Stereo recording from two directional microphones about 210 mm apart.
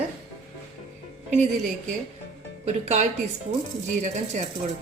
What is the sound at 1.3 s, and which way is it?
A woman's voice, 35° right (ahead or behind).